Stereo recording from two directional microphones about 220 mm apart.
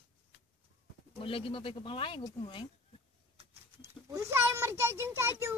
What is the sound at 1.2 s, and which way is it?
Speech, 25° left (ahead or behind).